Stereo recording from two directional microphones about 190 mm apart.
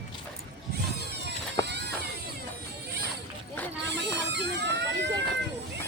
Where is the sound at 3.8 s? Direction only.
65° right (ahead or behind).